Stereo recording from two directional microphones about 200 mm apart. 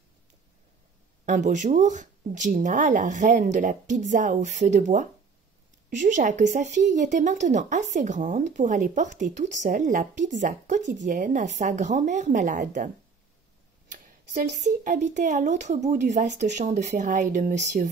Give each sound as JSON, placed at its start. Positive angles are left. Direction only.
{"t": 1.2, "sound": "speech", "side_deg": -40}